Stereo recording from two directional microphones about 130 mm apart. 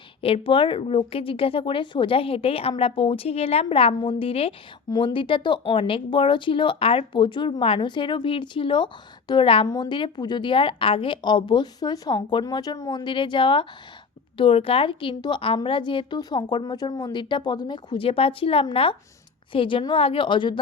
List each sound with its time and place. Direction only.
0.2 s speech: 45° left (ahead or behind)
9.6 s speech: 30° left (ahead or behind)